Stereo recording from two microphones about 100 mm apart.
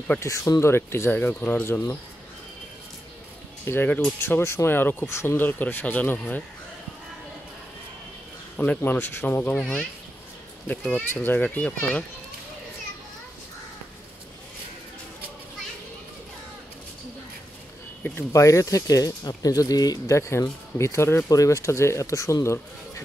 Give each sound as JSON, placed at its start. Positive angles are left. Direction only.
{"t": 0.2, "sound": "speech", "side_deg": 30}
{"t": 3.6, "sound": "speech", "side_deg": 20}
{"t": 8.5, "sound": "speech", "side_deg": 15}
{"t": 18.3, "sound": "speech", "side_deg": 30}
{"t": 20.2, "sound": "speech", "side_deg": 30}